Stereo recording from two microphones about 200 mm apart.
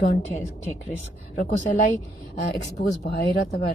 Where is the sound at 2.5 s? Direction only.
55° left (ahead or behind).